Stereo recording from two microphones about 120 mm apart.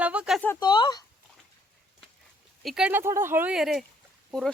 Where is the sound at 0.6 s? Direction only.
40° left (ahead or behind).